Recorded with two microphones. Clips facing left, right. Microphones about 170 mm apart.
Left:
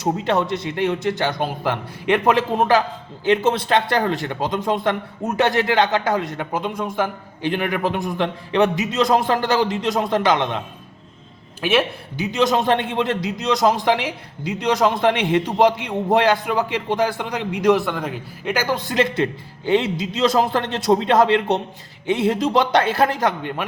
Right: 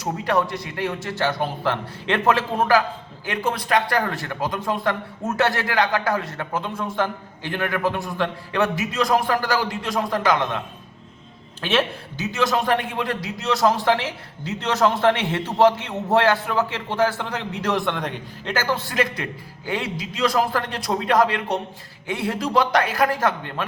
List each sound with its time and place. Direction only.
0.0 s speech: 25° left (ahead or behind)
11.6 s a man's voice: 10° left (ahead or behind)
18.5 s speech: 15° left (ahead or behind)